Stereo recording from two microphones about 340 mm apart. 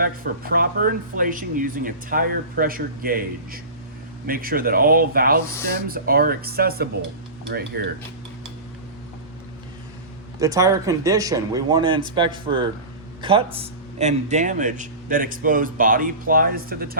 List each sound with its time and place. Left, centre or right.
0.0 s a man's voice: right
10.4 s a man's voice: centre; by 17.0 s right